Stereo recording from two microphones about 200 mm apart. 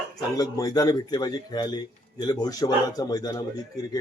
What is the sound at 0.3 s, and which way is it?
Speech, 15° left (ahead or behind).